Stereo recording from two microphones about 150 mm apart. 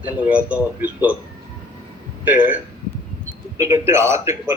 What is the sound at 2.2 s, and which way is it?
A man's voice, 10° right (ahead or behind).